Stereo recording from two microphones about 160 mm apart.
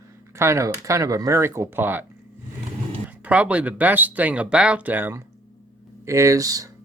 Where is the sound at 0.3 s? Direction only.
15° right (ahead or behind).